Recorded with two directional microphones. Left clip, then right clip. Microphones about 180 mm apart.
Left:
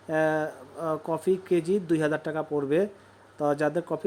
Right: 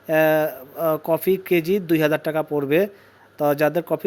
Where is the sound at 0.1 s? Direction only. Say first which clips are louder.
Right 8 dB; 15° right (ahead or behind).